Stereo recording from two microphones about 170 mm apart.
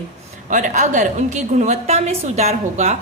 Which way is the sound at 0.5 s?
45° right (ahead or behind).